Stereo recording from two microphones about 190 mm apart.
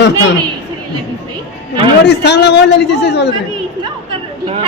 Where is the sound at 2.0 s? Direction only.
65° left (ahead or behind).